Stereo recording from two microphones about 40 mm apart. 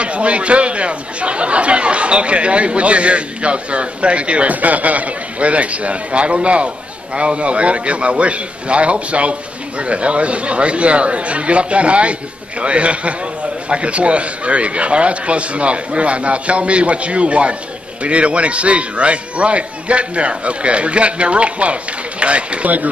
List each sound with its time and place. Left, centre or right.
0.0 s a man's voice: right